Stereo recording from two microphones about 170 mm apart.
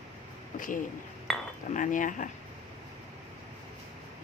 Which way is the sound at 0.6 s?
50° left (ahead or behind).